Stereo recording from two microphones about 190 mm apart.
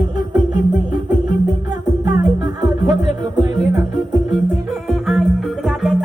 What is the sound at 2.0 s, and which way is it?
Music, 20° right (ahead or behind).